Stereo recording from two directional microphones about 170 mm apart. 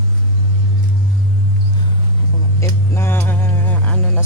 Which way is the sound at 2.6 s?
15° left (ahead or behind).